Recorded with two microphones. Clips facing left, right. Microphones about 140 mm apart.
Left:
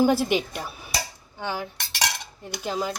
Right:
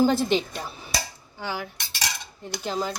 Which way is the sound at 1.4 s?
20° left (ahead or behind).